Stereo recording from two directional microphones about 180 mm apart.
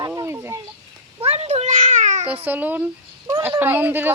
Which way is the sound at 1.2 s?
35° right (ahead or behind).